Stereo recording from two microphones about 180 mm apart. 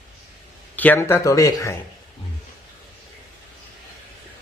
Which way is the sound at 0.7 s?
10° left (ahead or behind).